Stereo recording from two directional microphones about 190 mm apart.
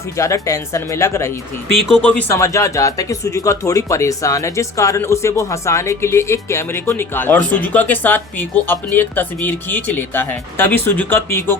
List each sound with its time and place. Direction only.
0.2 s speech: 15° left (ahead or behind)